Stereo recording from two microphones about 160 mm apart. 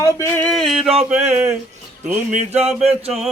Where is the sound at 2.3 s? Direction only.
45° right (ahead or behind).